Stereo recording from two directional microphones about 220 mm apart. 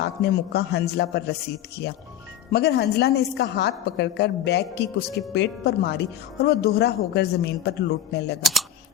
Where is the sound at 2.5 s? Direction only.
50° left (ahead or behind).